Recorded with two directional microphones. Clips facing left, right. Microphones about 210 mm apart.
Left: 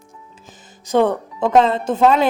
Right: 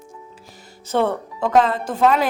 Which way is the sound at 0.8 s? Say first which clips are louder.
Left 4 dB; 15° left (ahead or behind).